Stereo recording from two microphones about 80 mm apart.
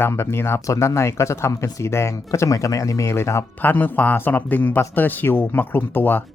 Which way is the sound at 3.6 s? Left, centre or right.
Left.